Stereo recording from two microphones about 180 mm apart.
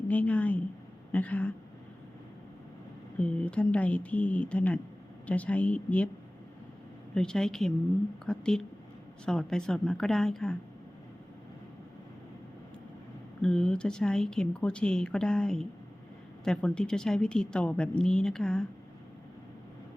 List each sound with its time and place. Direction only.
0.1 s speech: 10° left (ahead or behind)
3.2 s speech: 5° left (ahead or behind)
7.1 s speech: 5° left (ahead or behind)
13.4 s speech: 5° left (ahead or behind)